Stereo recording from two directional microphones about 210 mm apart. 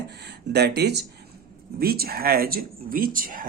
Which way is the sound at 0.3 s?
50° right (ahead or behind).